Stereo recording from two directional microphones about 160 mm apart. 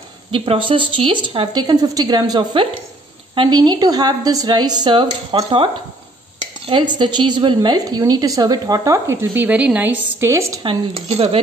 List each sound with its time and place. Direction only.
0.3 s a woman's voice: 35° right (ahead or behind)
6.7 s a woman's voice: 30° right (ahead or behind)
10.6 s speech: 35° right (ahead or behind)